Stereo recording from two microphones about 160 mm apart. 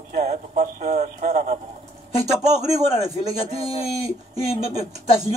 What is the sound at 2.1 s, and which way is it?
Speech, 25° right (ahead or behind).